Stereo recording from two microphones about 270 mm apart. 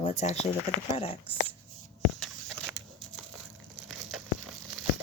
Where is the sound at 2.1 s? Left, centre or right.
Centre.